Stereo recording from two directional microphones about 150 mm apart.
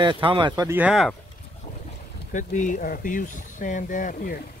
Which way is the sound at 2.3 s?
60° left (ahead or behind).